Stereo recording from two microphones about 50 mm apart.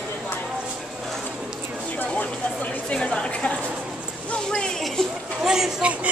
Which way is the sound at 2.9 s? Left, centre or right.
Centre.